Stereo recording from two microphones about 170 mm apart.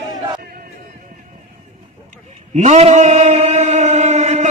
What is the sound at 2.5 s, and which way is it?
Chant, 40° right (ahead or behind).